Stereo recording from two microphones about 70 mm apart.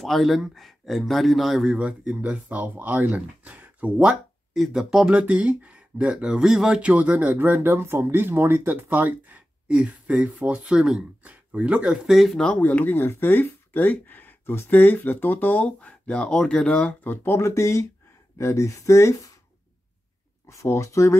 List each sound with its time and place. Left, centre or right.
0.0 s speech: centre
1.7 s speech: centre
4.6 s speech: centre
5.1 s speech: centre
12.5 s speech: left
17.0 s speech: left
20.4 s speech: left